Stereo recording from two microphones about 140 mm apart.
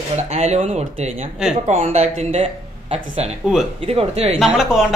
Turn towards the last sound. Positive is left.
turn(degrees=-5)  # may be behind; listen again after turning